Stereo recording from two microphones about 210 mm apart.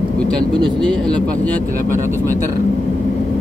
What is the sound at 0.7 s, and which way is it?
Speech, 5° left (ahead or behind).